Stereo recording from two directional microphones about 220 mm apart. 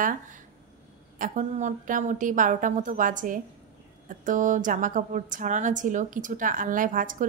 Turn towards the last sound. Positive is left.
turn(degrees=-35)  # may be behind; listen again after turning